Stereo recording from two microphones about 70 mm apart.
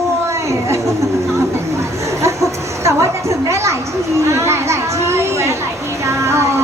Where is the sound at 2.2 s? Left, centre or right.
Right.